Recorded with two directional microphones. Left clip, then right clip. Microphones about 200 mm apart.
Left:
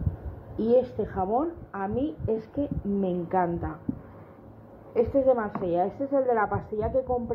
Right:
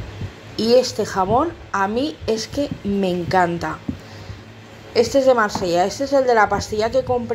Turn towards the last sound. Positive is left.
turn(degrees=-20)  # may be behind; listen again after turning